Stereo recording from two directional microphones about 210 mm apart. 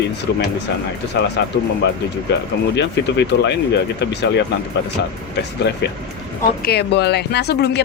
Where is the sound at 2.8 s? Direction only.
55° left (ahead or behind).